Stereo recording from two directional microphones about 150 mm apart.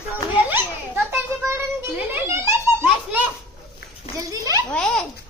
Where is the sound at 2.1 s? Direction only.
15° right (ahead or behind).